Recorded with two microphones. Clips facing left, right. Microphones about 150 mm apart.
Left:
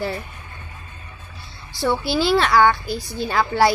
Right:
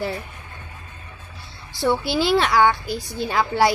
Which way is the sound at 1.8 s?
15° right (ahead or behind).